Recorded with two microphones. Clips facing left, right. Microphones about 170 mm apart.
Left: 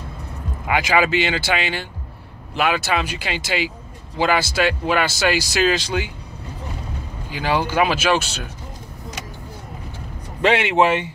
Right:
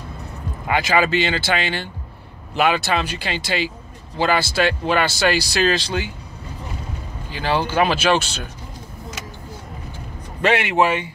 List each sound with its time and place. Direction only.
0.7 s speech: 10° left (ahead or behind)
7.2 s speech: 10° left (ahead or behind)
10.4 s speech: 20° left (ahead or behind)